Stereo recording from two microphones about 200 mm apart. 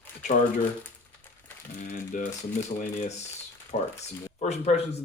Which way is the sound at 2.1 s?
40° left (ahead or behind).